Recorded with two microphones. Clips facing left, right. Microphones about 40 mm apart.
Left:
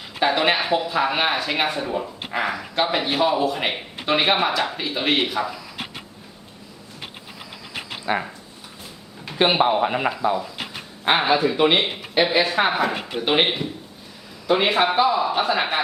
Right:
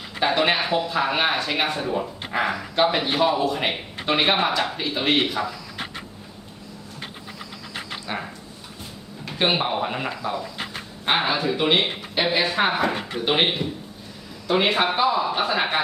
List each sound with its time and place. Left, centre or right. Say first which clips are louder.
0.2 s speech: left 1 dB; centre
8.0 s speech: left 8 dB; centre
9.2 s speech: left 4 dB; centre